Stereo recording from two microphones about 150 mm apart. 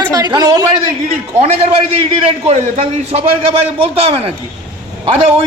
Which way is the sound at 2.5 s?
45° right (ahead or behind).